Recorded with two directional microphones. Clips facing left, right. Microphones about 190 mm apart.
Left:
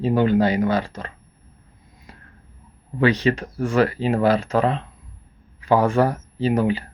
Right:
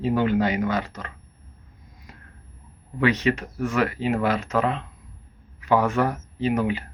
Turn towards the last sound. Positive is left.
turn(degrees=30)  # may be behind; listen again after turning